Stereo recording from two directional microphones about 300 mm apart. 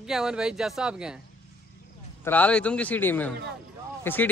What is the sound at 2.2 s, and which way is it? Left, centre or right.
Speech, centre.